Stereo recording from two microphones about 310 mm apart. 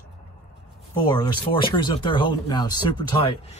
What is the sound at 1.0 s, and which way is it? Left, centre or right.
Speech, centre.